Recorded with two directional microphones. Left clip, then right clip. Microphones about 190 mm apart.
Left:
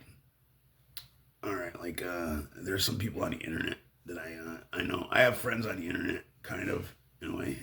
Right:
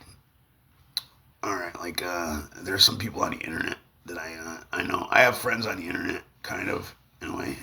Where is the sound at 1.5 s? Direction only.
40° left (ahead or behind).